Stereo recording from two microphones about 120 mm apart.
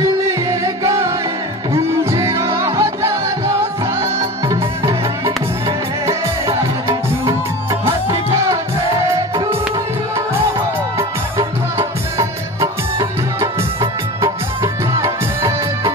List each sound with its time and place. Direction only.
0.5 s music: 25° right (ahead or behind)
4.5 s music: 40° right (ahead or behind)
6.0 s music: 25° right (ahead or behind)
11.0 s music: 25° right (ahead or behind)
14.2 s music: 30° right (ahead or behind)